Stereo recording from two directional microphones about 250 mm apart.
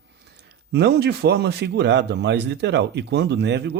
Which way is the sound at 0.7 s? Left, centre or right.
Right.